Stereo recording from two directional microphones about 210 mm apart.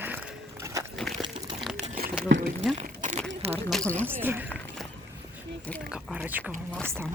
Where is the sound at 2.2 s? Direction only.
55° right (ahead or behind).